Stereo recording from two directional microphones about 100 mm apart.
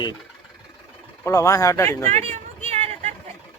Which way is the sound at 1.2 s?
30° left (ahead or behind).